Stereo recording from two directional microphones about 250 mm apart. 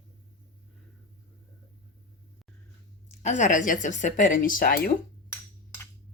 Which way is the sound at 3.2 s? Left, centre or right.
Left.